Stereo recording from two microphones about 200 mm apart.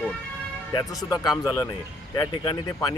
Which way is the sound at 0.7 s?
20° left (ahead or behind).